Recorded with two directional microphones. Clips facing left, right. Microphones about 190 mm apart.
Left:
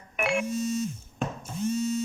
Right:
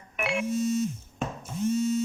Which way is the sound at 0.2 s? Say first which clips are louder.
Left 2 dB; 50° left (ahead or behind).